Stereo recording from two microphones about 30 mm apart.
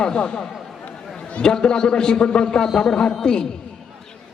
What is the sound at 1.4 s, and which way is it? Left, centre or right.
A man's voice, left.